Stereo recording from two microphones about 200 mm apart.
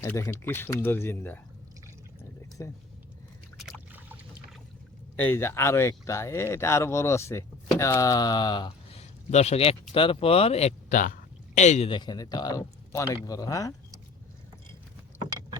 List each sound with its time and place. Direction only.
0.0 s speech: 15° left (ahead or behind)
2.6 s speech: 15° left (ahead or behind)
3.6 s boat: centre (ahead or behind)
5.2 s speech: 10° left (ahead or behind)